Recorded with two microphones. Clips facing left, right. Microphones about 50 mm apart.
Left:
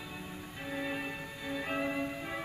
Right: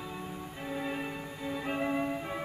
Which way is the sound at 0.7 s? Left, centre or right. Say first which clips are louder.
Right 1 dB; centre.